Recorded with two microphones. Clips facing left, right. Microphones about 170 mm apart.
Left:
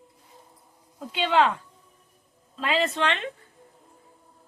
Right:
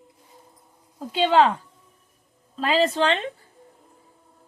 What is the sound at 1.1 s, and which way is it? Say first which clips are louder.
Speech: right 4 dB; 35° right (ahead or behind).